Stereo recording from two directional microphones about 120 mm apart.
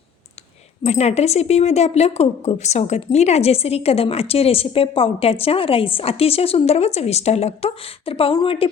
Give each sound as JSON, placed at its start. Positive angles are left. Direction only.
{"t": 0.9, "sound": "speech", "side_deg": 65}